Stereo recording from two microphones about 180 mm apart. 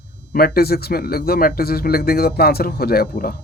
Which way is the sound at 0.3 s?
55° left (ahead or behind).